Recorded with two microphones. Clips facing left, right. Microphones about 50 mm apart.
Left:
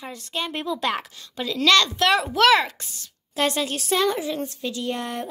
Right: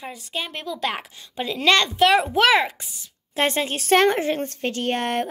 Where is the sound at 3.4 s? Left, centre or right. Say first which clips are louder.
Right 1 dB; right.